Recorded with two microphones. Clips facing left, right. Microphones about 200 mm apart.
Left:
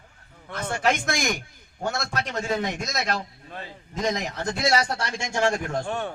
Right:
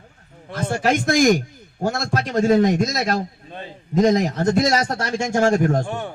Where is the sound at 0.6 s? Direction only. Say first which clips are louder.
Right 5 dB; 40° right (ahead or behind).